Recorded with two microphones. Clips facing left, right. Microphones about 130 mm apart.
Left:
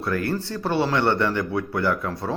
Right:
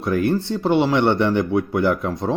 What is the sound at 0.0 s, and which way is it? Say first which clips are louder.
Speech: right 5 dB; 20° right (ahead or behind).